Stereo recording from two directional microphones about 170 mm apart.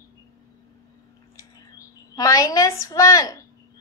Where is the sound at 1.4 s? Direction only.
20° left (ahead or behind).